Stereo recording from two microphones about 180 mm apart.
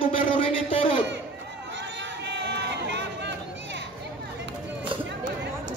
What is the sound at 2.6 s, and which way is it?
Crowd, 75° right (ahead or behind).